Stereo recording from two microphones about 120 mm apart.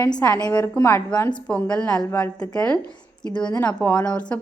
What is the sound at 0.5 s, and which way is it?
A woman's voice, 20° left (ahead or behind).